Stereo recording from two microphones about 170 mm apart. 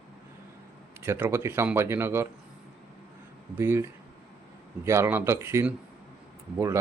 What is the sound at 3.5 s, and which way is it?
Speech, 15° right (ahead or behind).